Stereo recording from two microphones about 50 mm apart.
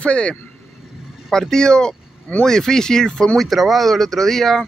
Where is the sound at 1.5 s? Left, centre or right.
Centre.